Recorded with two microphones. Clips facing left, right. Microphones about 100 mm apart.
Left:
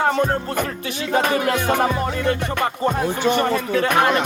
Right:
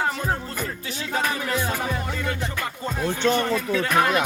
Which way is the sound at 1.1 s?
70° left (ahead or behind).